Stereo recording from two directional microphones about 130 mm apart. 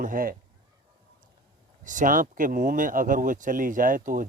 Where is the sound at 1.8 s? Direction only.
80° right.